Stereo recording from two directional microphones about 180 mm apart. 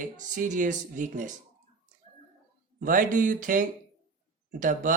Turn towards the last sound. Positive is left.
turn(degrees=-45)  # may be behind; listen again after turning